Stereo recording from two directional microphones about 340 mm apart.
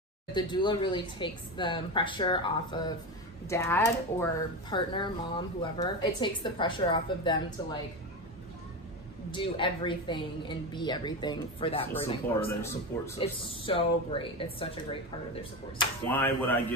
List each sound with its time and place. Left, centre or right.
0.3 s speech: centre
9.3 s speech: centre